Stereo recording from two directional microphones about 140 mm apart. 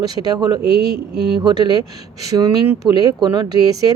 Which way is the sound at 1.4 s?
30° right (ahead or behind).